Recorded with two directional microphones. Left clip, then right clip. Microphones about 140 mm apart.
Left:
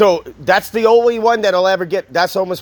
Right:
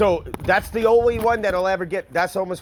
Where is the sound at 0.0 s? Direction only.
60° left (ahead or behind).